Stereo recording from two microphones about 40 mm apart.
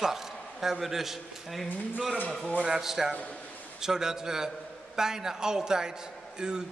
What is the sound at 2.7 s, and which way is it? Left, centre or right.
A man's voice, centre.